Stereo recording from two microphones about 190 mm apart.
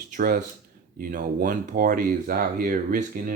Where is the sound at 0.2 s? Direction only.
50° right (ahead or behind).